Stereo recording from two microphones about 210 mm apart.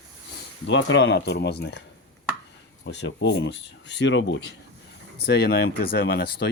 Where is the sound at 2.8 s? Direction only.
55° left (ahead or behind).